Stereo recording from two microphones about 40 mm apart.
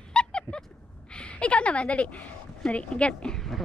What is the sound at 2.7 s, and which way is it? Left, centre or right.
Speech, left.